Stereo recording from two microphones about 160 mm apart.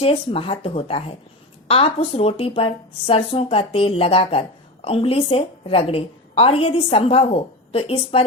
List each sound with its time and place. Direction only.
0.0 s speech: 35° left (ahead or behind)